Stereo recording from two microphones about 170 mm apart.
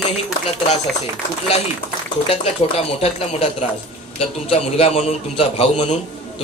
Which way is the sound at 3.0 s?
35° left (ahead or behind).